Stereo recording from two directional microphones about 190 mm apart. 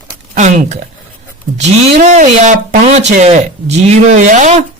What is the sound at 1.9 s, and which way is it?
Speech, 45° right (ahead or behind).